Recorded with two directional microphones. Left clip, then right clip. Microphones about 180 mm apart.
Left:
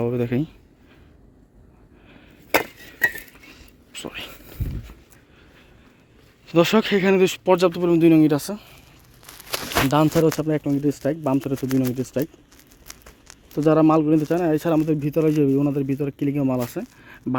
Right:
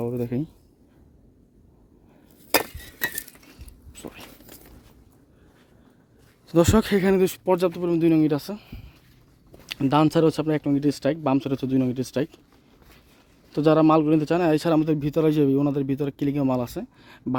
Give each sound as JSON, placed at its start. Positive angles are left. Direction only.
{"t": 0.0, "sound": "speech", "side_deg": 0}
{"t": 3.9, "sound": "whispering", "side_deg": -5}
{"t": 6.5, "sound": "speech", "side_deg": -25}
{"t": 7.7, "sound": "speech", "side_deg": 5}
{"t": 9.9, "sound": "speech", "side_deg": -10}
{"t": 13.5, "sound": "speech", "side_deg": -10}
{"t": 14.9, "sound": "speech", "side_deg": 0}